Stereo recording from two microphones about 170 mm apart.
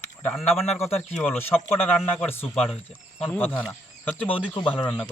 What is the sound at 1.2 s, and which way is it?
Speech, 10° left (ahead or behind).